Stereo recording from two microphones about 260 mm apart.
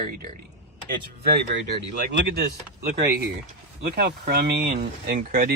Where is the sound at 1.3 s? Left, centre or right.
Right.